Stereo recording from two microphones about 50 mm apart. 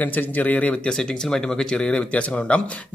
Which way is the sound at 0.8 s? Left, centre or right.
Centre.